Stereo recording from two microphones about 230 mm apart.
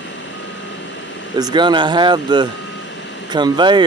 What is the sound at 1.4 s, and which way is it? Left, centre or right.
Speech, centre.